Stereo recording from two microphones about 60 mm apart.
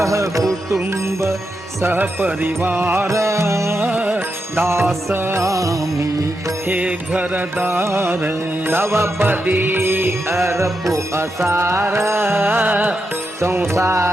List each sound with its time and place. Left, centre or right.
0.0 s music: right
1.9 s music: right
3.1 s music: right
3.8 s music: right
4.5 s music: right
5.4 s music: right
6.7 s mantra: right
7.6 s music: right
9.2 s music: right
13.4 s music: right